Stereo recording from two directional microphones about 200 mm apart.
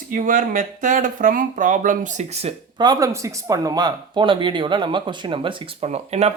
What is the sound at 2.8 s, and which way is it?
Speech, 20° right (ahead or behind).